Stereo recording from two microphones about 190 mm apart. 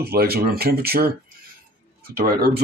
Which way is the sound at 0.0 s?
55° right (ahead or behind).